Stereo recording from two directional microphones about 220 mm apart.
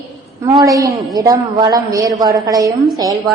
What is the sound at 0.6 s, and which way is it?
A woman's voice, 15° right (ahead or behind).